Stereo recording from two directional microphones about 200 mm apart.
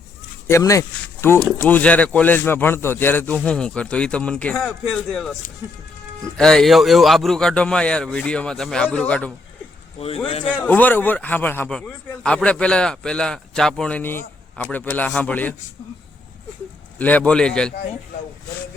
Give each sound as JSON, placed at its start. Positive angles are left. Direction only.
{"t": 0.4, "sound": "a man's voice", "side_deg": 15}
{"t": 10.2, "sound": "speech", "side_deg": 30}
{"t": 10.6, "sound": "a man's voice", "side_deg": 10}
{"t": 17.0, "sound": "a man's voice", "side_deg": 5}